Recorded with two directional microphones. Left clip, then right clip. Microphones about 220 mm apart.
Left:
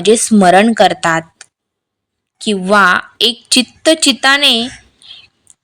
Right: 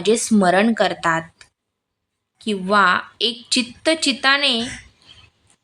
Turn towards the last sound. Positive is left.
turn(degrees=35)  # may be behind; listen again after turning